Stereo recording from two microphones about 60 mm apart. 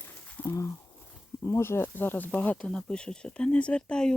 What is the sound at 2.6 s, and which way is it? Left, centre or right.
Speech, centre.